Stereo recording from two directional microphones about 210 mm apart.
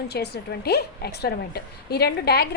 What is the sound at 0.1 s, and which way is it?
A woman's voice, 50° left (ahead or behind).